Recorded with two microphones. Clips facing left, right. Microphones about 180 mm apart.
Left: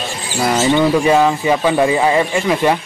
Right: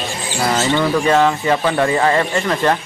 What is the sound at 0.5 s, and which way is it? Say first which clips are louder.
Speech: left 4 dB; 15° left (ahead or behind).